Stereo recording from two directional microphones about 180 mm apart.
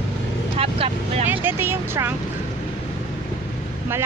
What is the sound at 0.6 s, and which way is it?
Speech, 30° right (ahead or behind).